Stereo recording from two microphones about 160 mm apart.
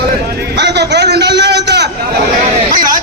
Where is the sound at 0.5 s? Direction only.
90° right.